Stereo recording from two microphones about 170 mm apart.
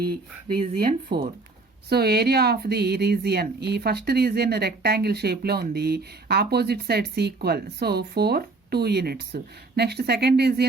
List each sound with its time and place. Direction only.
0.0 s speech: 65° right (ahead or behind)